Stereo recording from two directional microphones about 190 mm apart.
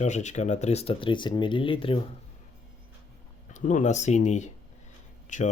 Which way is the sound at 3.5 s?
40° left (ahead or behind).